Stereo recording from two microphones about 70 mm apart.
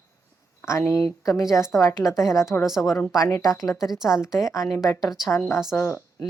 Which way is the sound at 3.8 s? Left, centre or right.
Centre.